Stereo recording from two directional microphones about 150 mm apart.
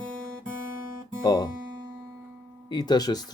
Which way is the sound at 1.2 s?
25° left (ahead or behind).